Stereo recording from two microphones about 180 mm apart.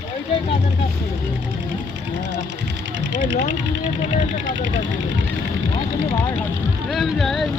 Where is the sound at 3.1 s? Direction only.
85° right.